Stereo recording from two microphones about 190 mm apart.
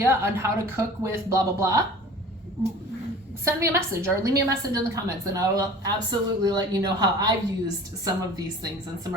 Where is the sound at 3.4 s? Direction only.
15° right (ahead or behind).